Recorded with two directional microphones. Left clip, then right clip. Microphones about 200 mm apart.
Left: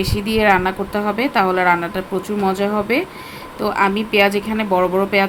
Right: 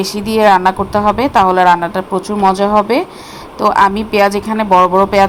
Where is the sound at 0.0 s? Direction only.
15° right (ahead or behind).